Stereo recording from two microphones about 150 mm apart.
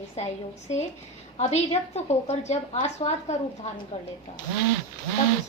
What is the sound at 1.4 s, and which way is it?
A woman's voice, 50° left (ahead or behind).